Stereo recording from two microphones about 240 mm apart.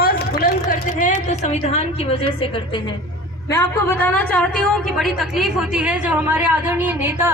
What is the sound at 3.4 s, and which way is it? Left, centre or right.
A woman's voice, centre.